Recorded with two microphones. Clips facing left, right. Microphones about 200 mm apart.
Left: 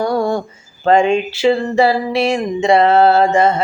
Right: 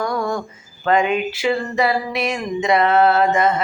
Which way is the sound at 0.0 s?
30° left (ahead or behind).